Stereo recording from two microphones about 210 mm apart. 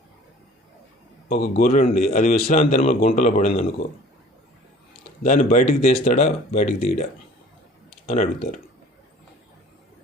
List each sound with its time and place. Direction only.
1.3 s a man's voice: 35° left (ahead or behind)
5.2 s a man's voice: 40° left (ahead or behind)